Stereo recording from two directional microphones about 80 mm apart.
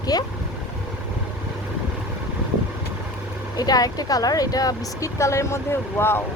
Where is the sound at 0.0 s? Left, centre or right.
Left.